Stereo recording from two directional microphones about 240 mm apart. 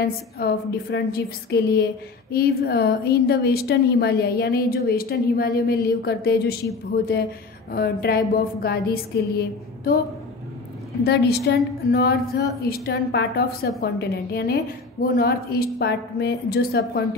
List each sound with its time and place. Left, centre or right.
0.0 s a woman's voice: left
7.7 s a woman's voice: left
11.1 s a woman's voice: left